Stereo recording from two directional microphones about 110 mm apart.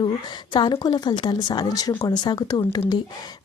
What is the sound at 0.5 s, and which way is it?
A woman's voice, 45° left (ahead or behind).